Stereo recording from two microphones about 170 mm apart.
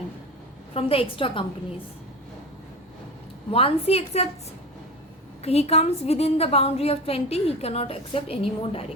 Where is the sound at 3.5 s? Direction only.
35° left (ahead or behind).